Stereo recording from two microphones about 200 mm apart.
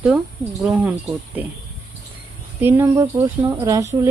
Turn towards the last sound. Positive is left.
turn(degrees=-15)  # may be behind; listen again after turning